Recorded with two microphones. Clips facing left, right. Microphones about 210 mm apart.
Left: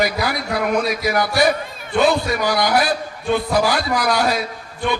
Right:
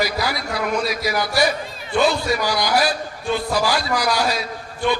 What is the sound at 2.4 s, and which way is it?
A man's voice, 55° left (ahead or behind).